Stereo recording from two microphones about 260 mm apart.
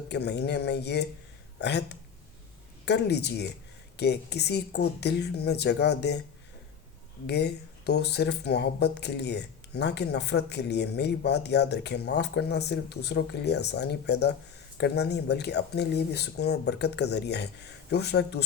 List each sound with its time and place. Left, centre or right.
0.1 s speech: left
7.3 s speech: left